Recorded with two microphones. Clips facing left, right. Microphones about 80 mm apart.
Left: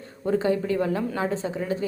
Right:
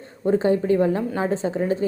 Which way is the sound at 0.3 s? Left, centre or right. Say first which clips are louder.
Right 4 dB; right.